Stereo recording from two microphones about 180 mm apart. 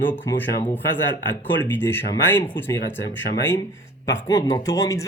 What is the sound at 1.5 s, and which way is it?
Speech, 10° left (ahead or behind).